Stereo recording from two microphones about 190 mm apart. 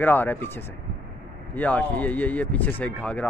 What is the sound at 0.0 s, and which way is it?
Speech, 10° left (ahead or behind).